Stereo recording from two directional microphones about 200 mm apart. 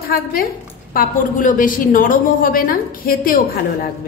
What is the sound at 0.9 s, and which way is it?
A woman's voice, 45° left (ahead or behind).